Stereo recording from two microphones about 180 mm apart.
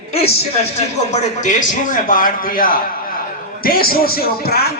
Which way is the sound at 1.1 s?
40° left (ahead or behind).